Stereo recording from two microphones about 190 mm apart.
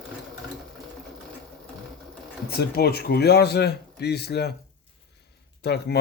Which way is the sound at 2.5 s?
55° left (ahead or behind).